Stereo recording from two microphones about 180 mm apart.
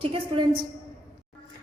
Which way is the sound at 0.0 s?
30° right (ahead or behind).